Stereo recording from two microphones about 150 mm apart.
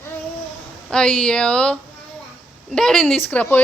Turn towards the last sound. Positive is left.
turn(degrees=10)  # may be behind; listen again after turning